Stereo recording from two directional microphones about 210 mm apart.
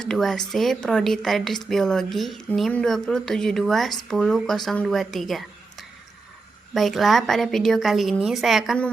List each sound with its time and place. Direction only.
0.0 s speech: centre (ahead or behind)
6.7 s speech: centre (ahead or behind)